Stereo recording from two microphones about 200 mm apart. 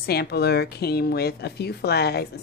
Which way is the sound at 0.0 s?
55° left (ahead or behind).